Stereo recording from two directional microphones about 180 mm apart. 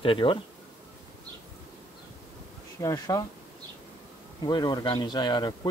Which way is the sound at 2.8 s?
20° left (ahead or behind).